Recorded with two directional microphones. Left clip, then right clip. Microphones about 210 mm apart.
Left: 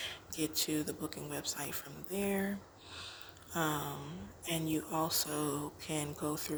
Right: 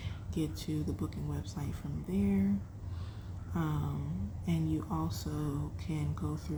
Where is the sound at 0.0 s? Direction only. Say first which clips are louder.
Even; 40° left (ahead or behind).